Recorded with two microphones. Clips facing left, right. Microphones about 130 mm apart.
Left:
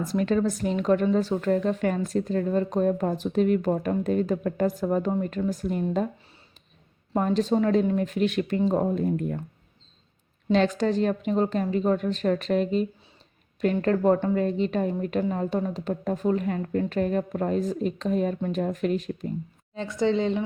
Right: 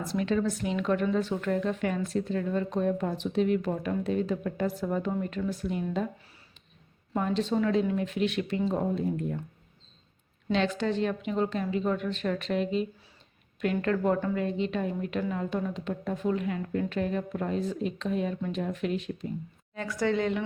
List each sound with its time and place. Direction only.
0.0 s a woman's voice: 45° left (ahead or behind)
7.1 s speech: 40° left (ahead or behind)
10.5 s a woman's voice: 40° left (ahead or behind)
19.7 s a woman's voice: 25° left (ahead or behind)